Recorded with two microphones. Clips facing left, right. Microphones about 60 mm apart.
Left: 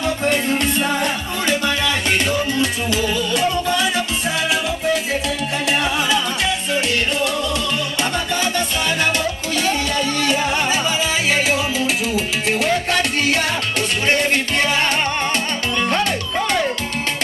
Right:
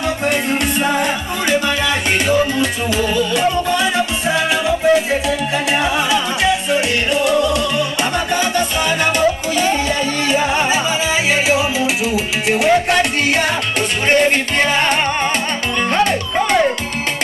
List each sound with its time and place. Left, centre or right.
0.2 s music: centre
10.2 s music: centre
14.0 s music: right
16.1 s music: right